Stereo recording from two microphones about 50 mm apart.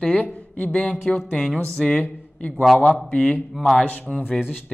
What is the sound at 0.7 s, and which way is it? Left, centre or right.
Speech, centre.